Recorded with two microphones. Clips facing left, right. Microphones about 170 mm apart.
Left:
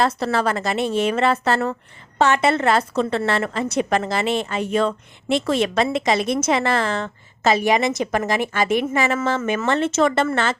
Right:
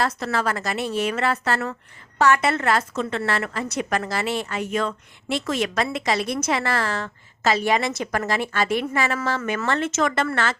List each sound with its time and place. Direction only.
0.0 s a woman's voice: 30° left (ahead or behind)